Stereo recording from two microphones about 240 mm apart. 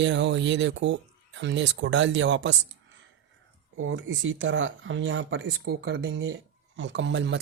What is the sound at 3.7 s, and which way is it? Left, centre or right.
Speech, right.